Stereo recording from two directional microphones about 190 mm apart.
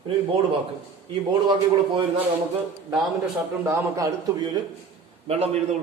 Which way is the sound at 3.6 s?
15° right (ahead or behind).